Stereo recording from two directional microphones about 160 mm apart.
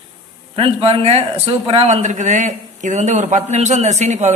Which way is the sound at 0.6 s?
40° right (ahead or behind).